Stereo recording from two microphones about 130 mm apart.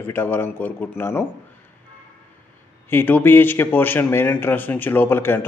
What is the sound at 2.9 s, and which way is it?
A man's voice, 15° left (ahead or behind).